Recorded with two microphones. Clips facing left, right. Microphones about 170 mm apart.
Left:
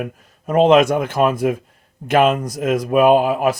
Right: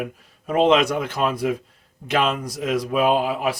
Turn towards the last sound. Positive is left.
turn(degrees=50)  # may be behind; listen again after turning